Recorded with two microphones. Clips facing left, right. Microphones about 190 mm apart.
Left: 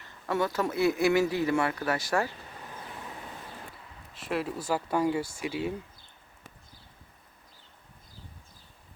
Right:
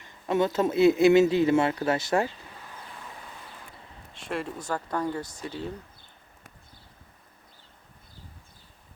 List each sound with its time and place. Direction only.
0.0 s speech: 20° right (ahead or behind)
4.1 s speech: 5° left (ahead or behind)